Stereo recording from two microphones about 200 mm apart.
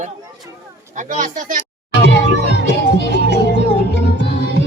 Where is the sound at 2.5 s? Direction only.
60° left (ahead or behind).